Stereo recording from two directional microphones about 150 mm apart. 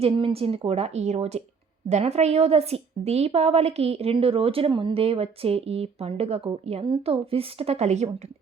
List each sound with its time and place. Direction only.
0.0 s a woman's voice: 40° right (ahead or behind)